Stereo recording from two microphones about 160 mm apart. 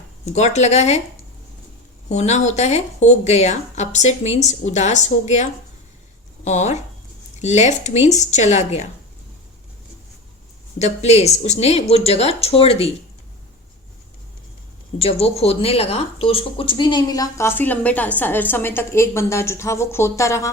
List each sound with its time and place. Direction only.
0.3 s speech: 45° left (ahead or behind)
2.0 s speech: 45° left (ahead or behind)
10.8 s speech: 45° left (ahead or behind)
14.9 s a woman's voice: 40° left (ahead or behind); by 20.5 s 20° left (ahead or behind)